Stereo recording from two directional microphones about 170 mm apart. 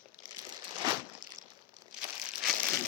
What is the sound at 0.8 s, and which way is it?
Crumpling, 25° right (ahead or behind).